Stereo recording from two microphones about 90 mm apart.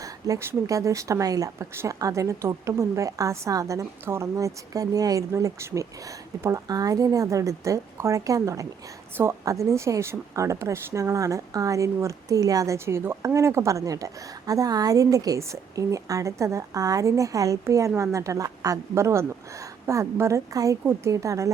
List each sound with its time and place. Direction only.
0.0 s speech: 35° right (ahead or behind)